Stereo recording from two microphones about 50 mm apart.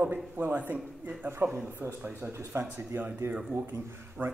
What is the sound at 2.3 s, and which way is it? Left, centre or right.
Speech, right.